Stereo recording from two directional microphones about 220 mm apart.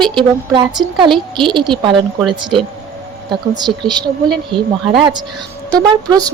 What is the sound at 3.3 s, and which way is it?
Speech, 20° right (ahead or behind).